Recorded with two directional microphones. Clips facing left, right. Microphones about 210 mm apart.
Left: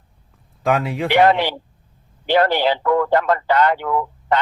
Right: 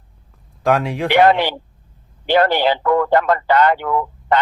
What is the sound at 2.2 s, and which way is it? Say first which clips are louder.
Speech: right 1 dB; 60° right (ahead or behind).